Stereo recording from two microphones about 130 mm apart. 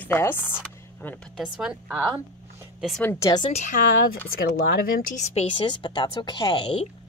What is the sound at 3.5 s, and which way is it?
Speech, 65° left (ahead or behind).